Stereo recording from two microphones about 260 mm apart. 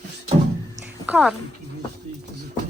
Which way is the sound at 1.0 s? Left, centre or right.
Centre.